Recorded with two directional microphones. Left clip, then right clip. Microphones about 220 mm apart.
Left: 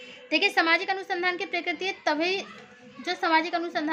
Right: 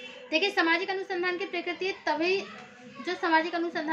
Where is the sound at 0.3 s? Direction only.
50° left (ahead or behind).